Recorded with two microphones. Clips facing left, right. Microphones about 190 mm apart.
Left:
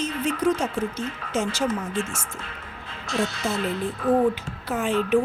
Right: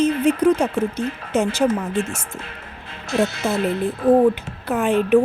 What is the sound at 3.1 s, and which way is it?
A woman's voice, 60° right (ahead or behind).